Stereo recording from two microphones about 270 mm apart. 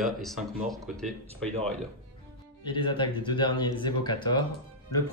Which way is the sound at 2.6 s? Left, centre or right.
Centre.